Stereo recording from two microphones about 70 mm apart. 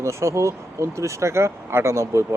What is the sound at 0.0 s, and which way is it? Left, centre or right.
Speech, right.